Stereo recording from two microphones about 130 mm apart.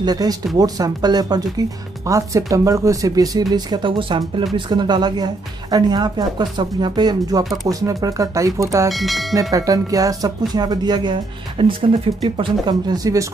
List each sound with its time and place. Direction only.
0.0 s speech: 30° right (ahead or behind)
8.8 s speech: centre (ahead or behind)
9.3 s speech: 25° right (ahead or behind)